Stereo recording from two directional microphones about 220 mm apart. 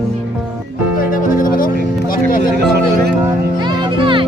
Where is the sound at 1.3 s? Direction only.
40° left (ahead or behind).